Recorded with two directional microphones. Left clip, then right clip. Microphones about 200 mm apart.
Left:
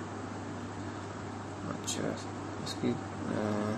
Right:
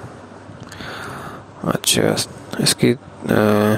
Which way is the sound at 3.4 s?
55° right (ahead or behind).